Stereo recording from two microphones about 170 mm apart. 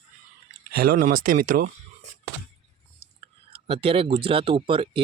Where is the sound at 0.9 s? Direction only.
50° right (ahead or behind).